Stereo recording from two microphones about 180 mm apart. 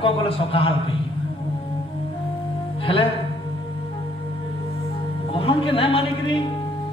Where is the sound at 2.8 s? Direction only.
30° left (ahead or behind).